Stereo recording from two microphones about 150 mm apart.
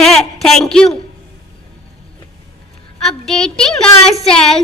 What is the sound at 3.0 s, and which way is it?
A woman's voice, 5° left (ahead or behind).